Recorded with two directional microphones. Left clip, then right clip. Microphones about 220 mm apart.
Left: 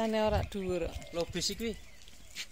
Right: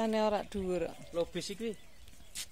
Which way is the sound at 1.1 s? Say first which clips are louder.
Left 2 dB; 40° left (ahead or behind).